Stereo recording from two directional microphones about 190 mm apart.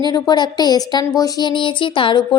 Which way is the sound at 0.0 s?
20° left (ahead or behind).